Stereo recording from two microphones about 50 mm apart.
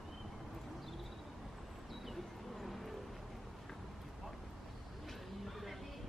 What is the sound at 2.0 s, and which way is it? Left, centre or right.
Bird, centre.